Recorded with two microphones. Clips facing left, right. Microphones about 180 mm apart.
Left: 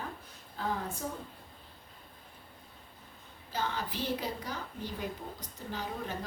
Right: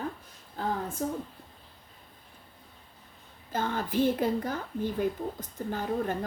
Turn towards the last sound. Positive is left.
turn(degrees=-50)  # may be behind; listen again after turning